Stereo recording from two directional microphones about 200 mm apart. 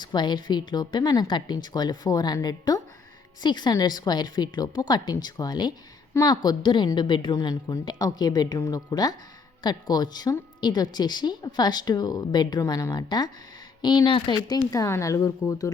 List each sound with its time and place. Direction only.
0.0 s a woman's voice: 20° left (ahead or behind)